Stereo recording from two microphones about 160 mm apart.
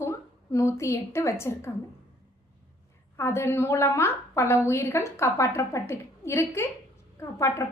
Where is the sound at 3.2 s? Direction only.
15° left (ahead or behind).